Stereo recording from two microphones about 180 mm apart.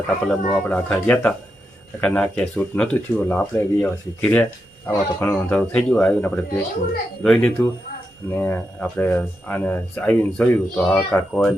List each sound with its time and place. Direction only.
0.3 s speech: 5° left (ahead or behind)